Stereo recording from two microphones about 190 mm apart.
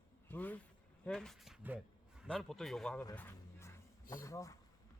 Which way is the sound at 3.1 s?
15° left (ahead or behind).